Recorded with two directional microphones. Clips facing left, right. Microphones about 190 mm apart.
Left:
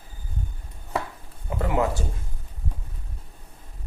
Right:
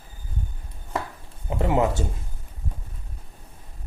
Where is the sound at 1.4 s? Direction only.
25° right (ahead or behind).